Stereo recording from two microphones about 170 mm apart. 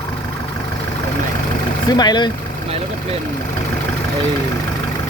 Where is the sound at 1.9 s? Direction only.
25° left (ahead or behind).